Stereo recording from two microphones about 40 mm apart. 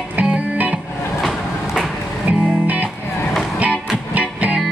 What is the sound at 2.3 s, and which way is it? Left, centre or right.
Music, right.